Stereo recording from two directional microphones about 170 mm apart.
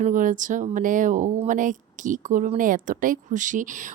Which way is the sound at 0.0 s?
50° right (ahead or behind).